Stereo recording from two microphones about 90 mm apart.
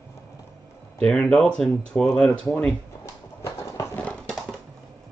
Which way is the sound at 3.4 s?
35° left (ahead or behind).